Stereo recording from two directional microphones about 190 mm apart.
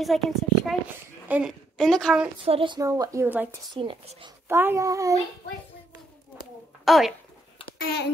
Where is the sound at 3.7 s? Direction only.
25° right (ahead or behind).